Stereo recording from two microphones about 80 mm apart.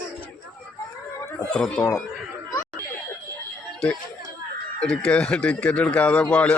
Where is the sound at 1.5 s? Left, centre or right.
Centre.